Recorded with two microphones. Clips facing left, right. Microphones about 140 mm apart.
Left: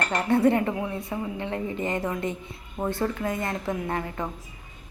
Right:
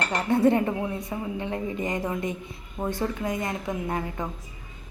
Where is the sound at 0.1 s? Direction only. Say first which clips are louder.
Even; 20° right (ahead or behind).